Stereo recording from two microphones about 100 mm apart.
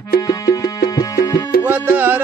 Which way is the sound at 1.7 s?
20° right (ahead or behind).